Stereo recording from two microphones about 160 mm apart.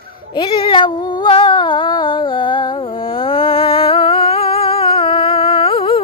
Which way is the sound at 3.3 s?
35° left (ahead or behind).